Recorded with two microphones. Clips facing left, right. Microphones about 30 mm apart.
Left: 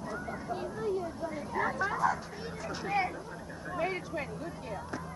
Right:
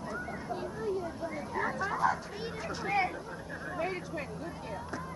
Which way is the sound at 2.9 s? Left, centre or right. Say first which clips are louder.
Right 1 dB; centre.